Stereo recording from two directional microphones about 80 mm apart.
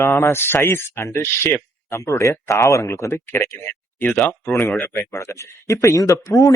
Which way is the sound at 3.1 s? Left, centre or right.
Left.